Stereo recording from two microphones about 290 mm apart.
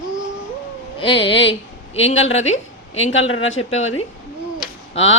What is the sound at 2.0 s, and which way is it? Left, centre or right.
Speech, left.